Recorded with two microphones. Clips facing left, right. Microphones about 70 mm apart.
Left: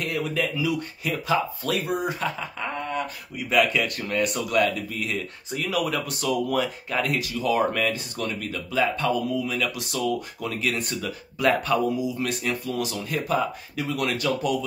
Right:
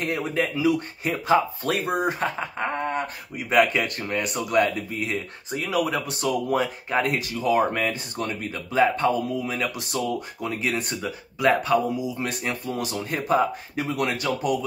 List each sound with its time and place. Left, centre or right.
0.3 s speech: right
4.0 s speech: right
12.0 s speech: right